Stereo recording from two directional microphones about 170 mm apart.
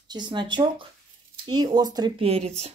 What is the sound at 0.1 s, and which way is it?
A woman's voice, 25° right (ahead or behind).